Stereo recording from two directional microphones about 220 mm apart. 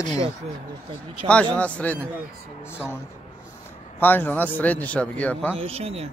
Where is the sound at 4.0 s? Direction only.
10° left (ahead or behind).